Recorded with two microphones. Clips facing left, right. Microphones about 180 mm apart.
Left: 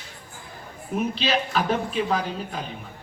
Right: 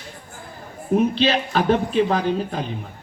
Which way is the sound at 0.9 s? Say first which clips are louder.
Right 6 dB; 35° right (ahead or behind).